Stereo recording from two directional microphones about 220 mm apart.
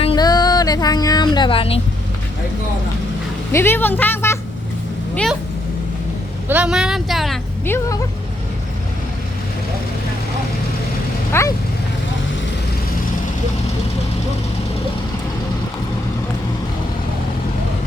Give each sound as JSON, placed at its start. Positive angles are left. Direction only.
{"t": 0.0, "sound": "a sound", "side_deg": 20}
{"t": 3.5, "sound": "speech", "side_deg": 10}
{"t": 6.5, "sound": "speech", "side_deg": -5}
{"t": 7.6, "sound": "speech", "side_deg": 10}
{"t": 11.3, "sound": "vehicle", "side_deg": 10}